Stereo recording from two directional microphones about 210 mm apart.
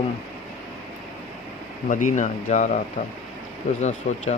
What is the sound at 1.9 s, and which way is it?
Speech, 40° left (ahead or behind).